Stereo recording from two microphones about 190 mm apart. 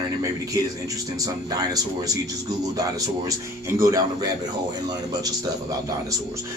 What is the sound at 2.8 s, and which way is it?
Speech, 20° right (ahead or behind).